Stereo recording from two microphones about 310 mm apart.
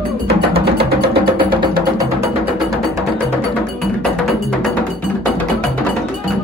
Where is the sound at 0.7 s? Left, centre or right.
Right.